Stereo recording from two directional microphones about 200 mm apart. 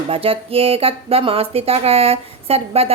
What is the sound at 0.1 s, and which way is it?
Speech, 30° right (ahead or behind).